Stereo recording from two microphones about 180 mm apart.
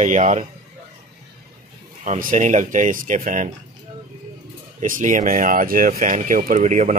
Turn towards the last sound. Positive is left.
turn(degrees=-40)  # may be behind; listen again after turning